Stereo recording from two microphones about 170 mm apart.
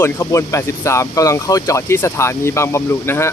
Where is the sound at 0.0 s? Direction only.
20° left (ahead or behind).